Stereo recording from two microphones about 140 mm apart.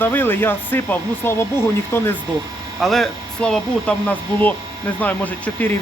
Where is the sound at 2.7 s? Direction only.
Centre (ahead or behind).